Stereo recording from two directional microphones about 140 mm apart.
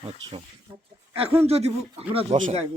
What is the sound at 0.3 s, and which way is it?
Speech, 40° right (ahead or behind).